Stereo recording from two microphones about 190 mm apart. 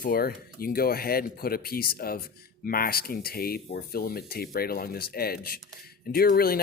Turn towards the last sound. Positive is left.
turn(degrees=50)  # may be behind; listen again after turning